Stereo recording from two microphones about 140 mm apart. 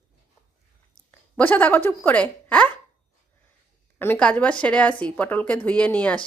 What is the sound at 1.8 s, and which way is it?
Speech, 10° left (ahead or behind).